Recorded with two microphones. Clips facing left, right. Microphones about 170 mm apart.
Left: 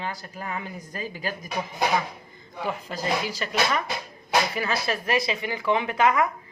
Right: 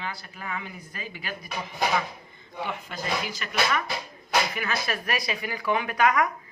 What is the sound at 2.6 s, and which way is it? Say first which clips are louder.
Speech: left 3 dB; 35° left (ahead or behind).